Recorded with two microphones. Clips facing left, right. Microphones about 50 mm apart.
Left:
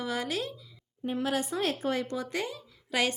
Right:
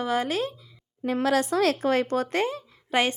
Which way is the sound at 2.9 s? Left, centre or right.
Right.